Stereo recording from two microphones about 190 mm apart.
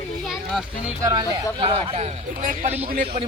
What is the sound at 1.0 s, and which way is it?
Speech, 20° right (ahead or behind).